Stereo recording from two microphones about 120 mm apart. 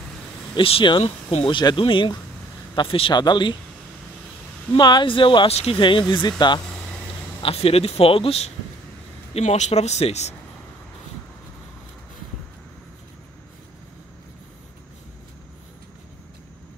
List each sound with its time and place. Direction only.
0.6 s speech: 45° left (ahead or behind)
4.7 s speech: 40° left (ahead or behind)
5.5 s speech: 60° left (ahead or behind)
5.8 s speech: 40° left (ahead or behind)
7.4 s speech: 55° left (ahead or behind)
9.3 s speech: 70° left (ahead or behind)